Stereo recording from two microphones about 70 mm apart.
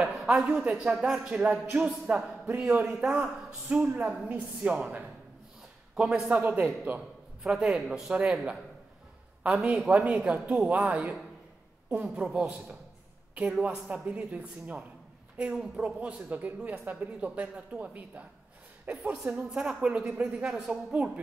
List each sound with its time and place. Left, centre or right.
0.0 s a sound: centre
0.8 s a man's voice: centre
3.1 s speech: centre
4.3 s speech: right
6.3 s speech: right
7.4 s speech: centre
15.5 s speech: centre
19.5 s speech: centre
19.8 s speech: centre